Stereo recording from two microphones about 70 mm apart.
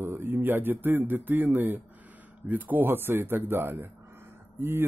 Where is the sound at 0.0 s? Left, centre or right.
Right.